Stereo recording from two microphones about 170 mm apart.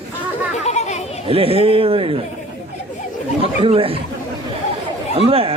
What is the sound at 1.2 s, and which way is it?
Speech, 35° right (ahead or behind).